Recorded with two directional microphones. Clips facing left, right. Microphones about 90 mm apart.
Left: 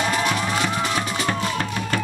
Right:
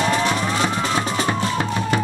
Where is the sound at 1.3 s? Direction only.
25° right (ahead or behind).